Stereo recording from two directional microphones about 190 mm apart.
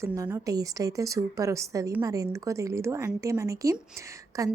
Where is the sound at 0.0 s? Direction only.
15° right (ahead or behind).